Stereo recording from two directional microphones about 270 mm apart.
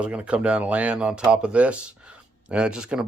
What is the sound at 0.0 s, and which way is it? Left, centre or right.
Speech, centre.